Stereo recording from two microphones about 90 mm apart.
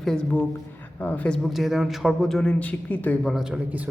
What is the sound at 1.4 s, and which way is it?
A man's voice, 5° right (ahead or behind).